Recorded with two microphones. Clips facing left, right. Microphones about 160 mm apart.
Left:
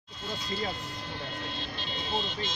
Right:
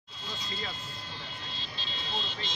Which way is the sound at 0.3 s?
50° left (ahead or behind).